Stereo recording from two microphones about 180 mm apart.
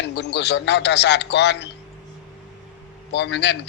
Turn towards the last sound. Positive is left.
turn(degrees=75)  # may be behind; listen again after turning